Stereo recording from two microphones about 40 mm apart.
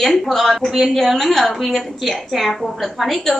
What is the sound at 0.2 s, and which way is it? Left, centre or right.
A woman's voice, centre.